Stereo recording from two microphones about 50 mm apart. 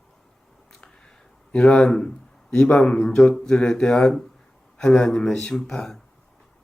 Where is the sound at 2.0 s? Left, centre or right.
Centre.